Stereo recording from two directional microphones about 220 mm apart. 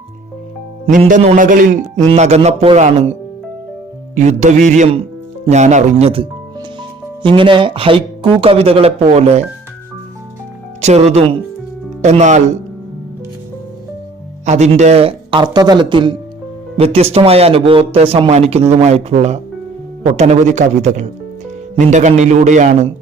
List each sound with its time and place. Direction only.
0.9 s a man's voice: 35° right (ahead or behind)
10.8 s a man's voice: 30° right (ahead or behind)
14.4 s a man's voice: 30° right (ahead or behind)